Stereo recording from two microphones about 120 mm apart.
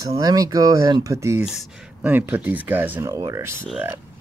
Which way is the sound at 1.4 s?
5° right (ahead or behind).